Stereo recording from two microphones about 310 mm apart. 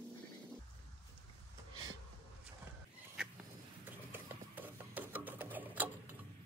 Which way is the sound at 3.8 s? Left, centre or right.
Centre.